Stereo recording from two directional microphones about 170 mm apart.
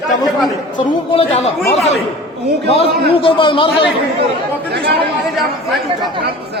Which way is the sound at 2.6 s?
35° left (ahead or behind).